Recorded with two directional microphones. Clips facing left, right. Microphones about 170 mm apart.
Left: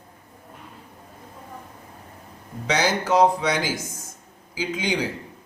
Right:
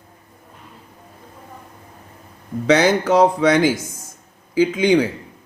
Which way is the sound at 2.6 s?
60° right (ahead or behind).